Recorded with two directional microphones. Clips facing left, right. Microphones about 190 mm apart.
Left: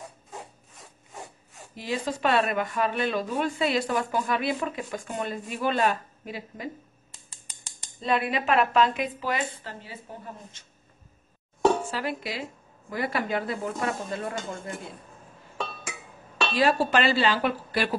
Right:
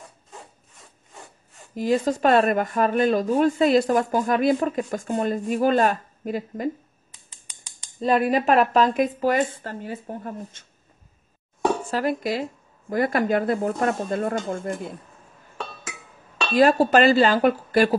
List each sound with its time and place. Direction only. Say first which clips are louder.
1.8 s speech: right 8 dB; 45° right (ahead or behind)
8.0 s speech: right 6 dB; 45° right (ahead or behind)
11.9 s speech: right 7 dB; 45° right (ahead or behind)
16.5 s speech: right 7 dB; 45° right (ahead or behind)